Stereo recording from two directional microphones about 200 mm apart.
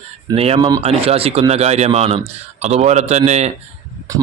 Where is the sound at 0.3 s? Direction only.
30° right (ahead or behind).